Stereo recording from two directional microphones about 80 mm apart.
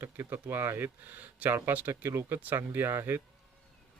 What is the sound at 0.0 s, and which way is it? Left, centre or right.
Speech, right.